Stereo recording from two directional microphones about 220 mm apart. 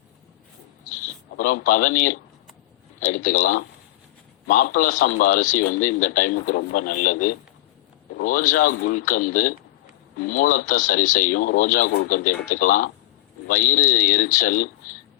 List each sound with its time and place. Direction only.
1.4 s speech: 40° left (ahead or behind)